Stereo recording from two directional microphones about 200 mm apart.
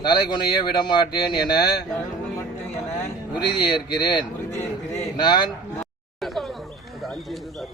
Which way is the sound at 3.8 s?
25° left (ahead or behind).